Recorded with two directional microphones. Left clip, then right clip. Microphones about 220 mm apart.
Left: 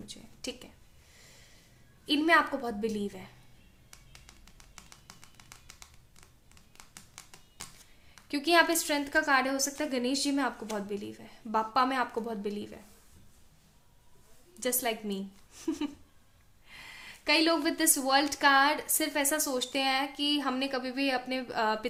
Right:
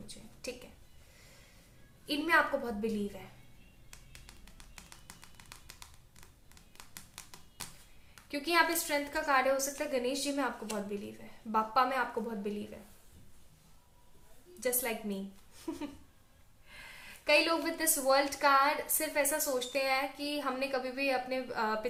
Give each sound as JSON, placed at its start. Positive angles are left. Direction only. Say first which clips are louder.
{"t": 0.1, "sound": "a sound", "louder": "left 2 dB", "side_deg": 45}
{"t": 2.0, "sound": "a woman's voice", "louder": "left 4 dB", "side_deg": 50}
{"t": 4.5, "sound": "tap", "louder": "left 1 dB", "side_deg": 5}
{"t": 8.3, "sound": "a woman's voice", "louder": "left 4 dB", "side_deg": 50}
{"t": 14.6, "sound": "a woman's voice", "louder": "left 3 dB", "side_deg": 50}
{"t": 17.2, "sound": "a woman's voice", "louder": "left 2 dB", "side_deg": 50}